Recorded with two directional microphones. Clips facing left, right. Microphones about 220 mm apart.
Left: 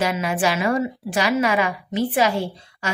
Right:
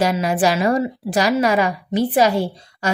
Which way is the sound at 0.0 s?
40° right (ahead or behind).